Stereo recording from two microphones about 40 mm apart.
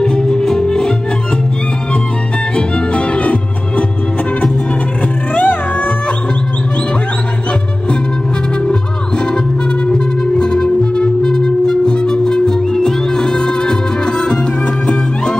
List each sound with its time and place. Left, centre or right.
0.0 s music: centre
2.5 s music: left
5.3 s music: left
9.8 s music: left